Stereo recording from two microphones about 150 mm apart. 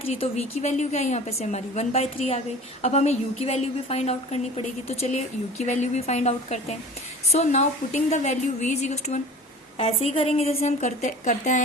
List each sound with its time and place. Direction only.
0.0 s a woman's voice: 40° left (ahead or behind)